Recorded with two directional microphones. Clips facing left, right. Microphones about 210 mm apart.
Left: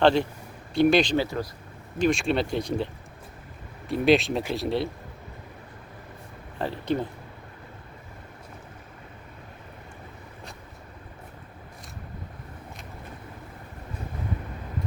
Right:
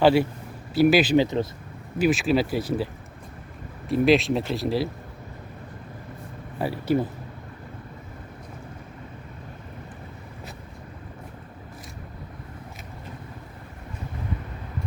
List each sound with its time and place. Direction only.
0.0 s speech: 5° right (ahead or behind)
1.1 s speech: 20° right (ahead or behind)
2.0 s speech: 5° right (ahead or behind)
6.6 s speech: 10° right (ahead or behind)